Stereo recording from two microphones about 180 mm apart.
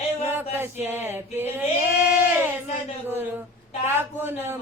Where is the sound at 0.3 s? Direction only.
10° right (ahead or behind).